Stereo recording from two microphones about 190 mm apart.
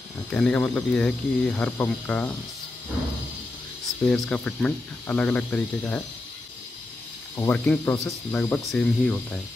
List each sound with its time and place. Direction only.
0.3 s speech: 5° left (ahead or behind)
4.0 s speech: 5° left (ahead or behind)
7.3 s speech: 10° left (ahead or behind)